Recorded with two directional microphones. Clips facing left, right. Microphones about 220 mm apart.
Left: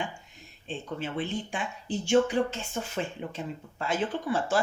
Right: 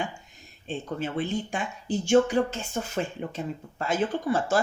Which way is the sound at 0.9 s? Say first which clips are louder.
Right 3 dB; 45° right (ahead or behind).